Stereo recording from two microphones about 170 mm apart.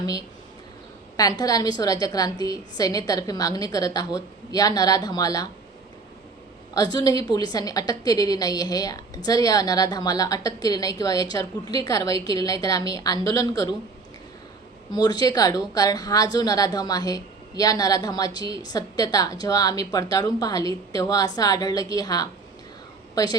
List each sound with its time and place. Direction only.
0.0 s a woman's voice: 20° left (ahead or behind)
6.7 s a woman's voice: 25° left (ahead or behind)
14.9 s a woman's voice: 25° left (ahead or behind)